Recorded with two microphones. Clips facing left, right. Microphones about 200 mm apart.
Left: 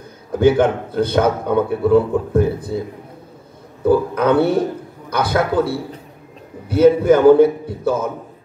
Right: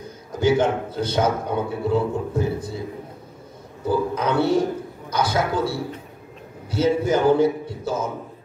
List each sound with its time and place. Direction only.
0.4 s a man's voice: 55° left (ahead or behind)
3.8 s a man's voice: 60° left (ahead or behind)